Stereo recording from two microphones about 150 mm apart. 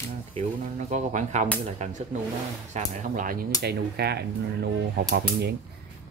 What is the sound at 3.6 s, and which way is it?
Speech, 90° right.